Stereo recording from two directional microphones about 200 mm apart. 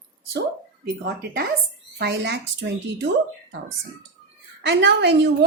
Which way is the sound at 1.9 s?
55° right (ahead or behind).